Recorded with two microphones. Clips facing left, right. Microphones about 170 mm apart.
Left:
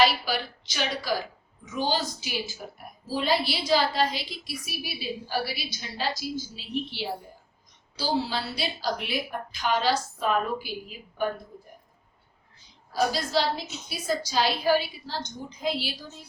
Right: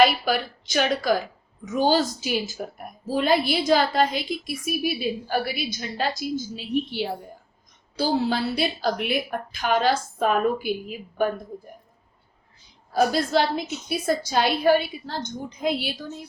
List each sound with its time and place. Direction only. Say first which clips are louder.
0.0 s a woman's voice: right 4 dB; 55° right (ahead or behind)
12.9 s a woman's voice: right 5 dB; 55° right (ahead or behind)